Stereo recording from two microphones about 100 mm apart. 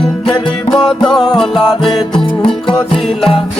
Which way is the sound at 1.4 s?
Centre (ahead or behind).